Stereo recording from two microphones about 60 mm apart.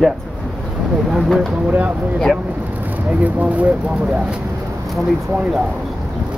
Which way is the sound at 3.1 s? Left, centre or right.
Right.